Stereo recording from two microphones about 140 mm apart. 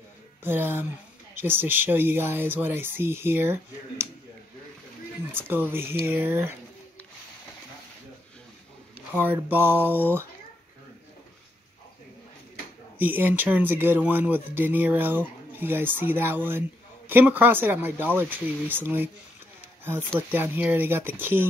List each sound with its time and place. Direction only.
0.4 s speech: 15° right (ahead or behind)
5.3 s speech: 15° right (ahead or behind)
9.1 s speech: 15° right (ahead or behind)
13.0 s speech: 15° right (ahead or behind)
20.2 s speech: 15° right (ahead or behind)